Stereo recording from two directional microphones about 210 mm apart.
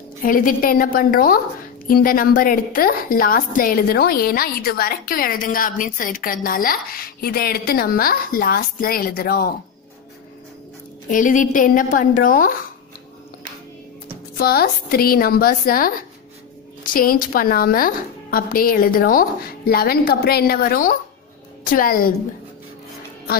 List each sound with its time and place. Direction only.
0.2 s a woman's voice: 40° left (ahead or behind)
11.1 s a woman's voice: 40° left (ahead or behind)
14.3 s a woman's voice: 45° left (ahead or behind)